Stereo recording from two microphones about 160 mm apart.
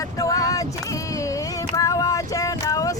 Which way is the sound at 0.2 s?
20° left (ahead or behind).